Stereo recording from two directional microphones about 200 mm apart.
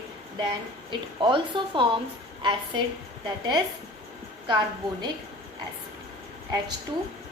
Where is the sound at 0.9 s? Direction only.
25° right (ahead or behind).